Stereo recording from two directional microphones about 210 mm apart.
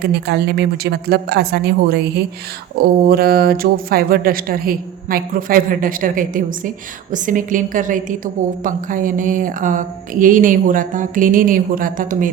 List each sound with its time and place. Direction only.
0.0 s speech: 50° right (ahead or behind)